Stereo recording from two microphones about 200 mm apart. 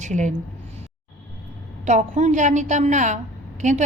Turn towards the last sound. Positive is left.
turn(degrees=-35)  # may be behind; listen again after turning